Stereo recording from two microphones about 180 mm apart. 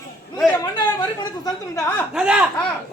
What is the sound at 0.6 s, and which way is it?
A woman's voice, 20° left (ahead or behind).